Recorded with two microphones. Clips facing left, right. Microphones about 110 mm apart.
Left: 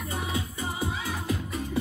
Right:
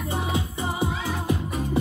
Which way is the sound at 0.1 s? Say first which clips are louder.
Right 5 dB; 25° right (ahead or behind).